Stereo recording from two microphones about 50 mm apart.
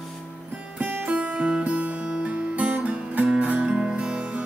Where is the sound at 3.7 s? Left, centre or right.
Centre.